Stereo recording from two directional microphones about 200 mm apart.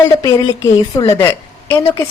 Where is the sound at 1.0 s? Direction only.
15° left (ahead or behind).